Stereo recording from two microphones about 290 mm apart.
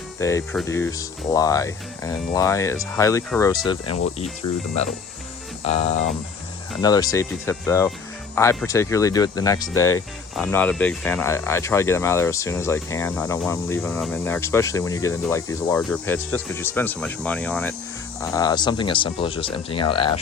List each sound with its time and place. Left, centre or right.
0.2 s speech: centre
4.4 s speech: left
5.6 s music: left
6.8 s speech: centre